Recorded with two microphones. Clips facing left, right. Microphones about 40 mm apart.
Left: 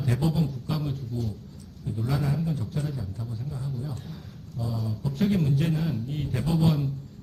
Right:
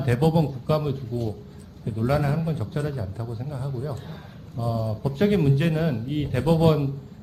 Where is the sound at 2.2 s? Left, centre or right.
Right.